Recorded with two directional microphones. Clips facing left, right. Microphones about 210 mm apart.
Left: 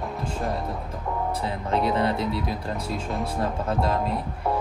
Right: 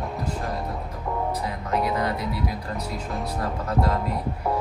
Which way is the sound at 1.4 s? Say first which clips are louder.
Left 1 dB; 30° left (ahead or behind).